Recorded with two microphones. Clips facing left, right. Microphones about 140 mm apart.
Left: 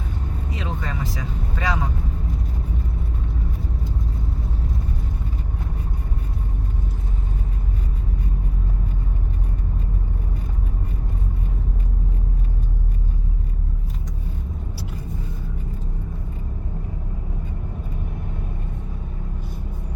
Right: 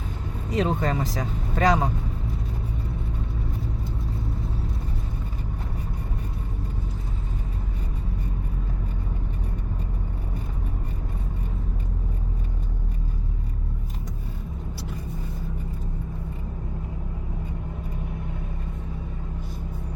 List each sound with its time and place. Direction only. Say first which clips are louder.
0.5 s speech: right 8 dB; 45° right (ahead or behind)